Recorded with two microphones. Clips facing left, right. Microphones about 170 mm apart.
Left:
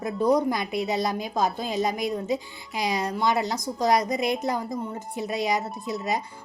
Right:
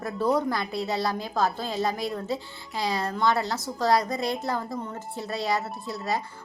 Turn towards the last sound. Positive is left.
turn(degrees=20)  # may be behind; listen again after turning